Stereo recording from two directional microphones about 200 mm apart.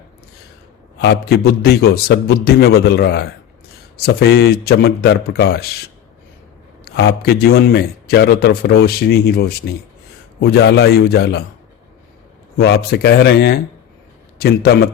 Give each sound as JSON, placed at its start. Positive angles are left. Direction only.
{"t": 0.9, "sound": "a man's voice", "side_deg": 50}
{"t": 6.8, "sound": "a man's voice", "side_deg": 55}
{"t": 12.5, "sound": "a man's voice", "side_deg": 50}